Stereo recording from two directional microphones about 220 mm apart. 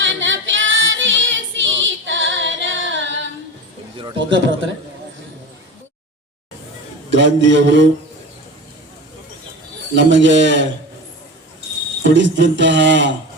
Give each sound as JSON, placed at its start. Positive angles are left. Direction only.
{"t": 0.0, "sound": "female singing", "side_deg": -60}
{"t": 3.9, "sound": "a sound", "side_deg": -25}
{"t": 4.2, "sound": "mantra", "side_deg": -55}
{"t": 7.1, "sound": "mantra", "side_deg": -55}
{"t": 9.9, "sound": "mantra", "side_deg": -55}
{"t": 12.1, "sound": "a sound", "side_deg": -55}